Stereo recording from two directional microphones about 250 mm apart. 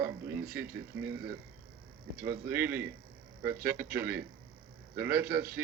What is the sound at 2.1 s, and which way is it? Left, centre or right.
Speech, right.